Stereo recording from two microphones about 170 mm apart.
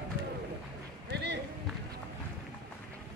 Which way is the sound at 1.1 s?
85° right.